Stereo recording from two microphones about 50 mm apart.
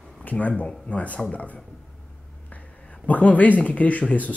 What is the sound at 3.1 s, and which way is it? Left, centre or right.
A woman's voice, left.